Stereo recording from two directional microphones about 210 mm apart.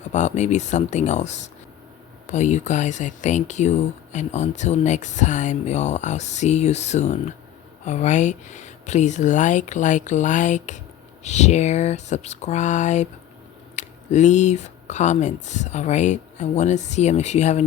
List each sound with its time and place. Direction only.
0.1 s speech: 35° left (ahead or behind)